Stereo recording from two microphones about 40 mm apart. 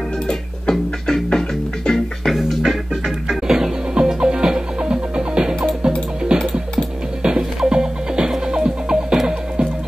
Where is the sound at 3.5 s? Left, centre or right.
Centre.